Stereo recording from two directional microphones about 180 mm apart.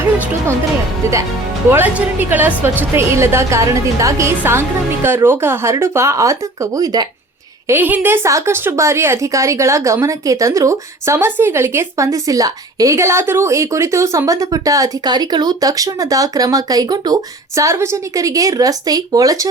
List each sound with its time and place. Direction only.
1.7 s a woman's voice: 10° right (ahead or behind)
7.7 s a woman's voice: 10° right (ahead or behind)